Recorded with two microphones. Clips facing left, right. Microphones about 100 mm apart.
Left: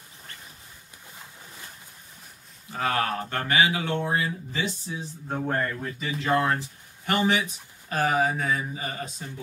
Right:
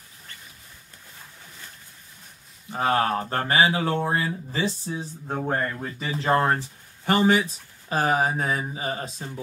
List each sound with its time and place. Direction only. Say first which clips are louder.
2.7 s speech: right 4 dB; 30° right (ahead or behind)
5.3 s speech: right 1 dB; 20° right (ahead or behind)
5.9 s speech: right 3 dB; 35° right (ahead or behind)